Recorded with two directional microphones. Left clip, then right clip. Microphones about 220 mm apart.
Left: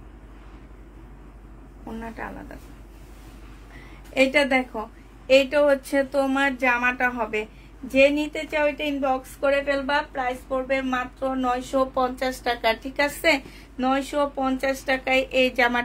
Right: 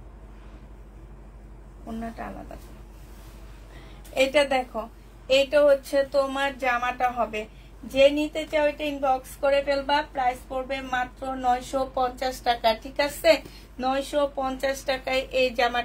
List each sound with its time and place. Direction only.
4.1 s a woman's voice: 35° left (ahead or behind)